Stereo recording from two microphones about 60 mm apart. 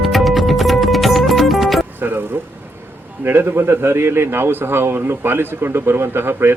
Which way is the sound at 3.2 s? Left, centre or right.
Right.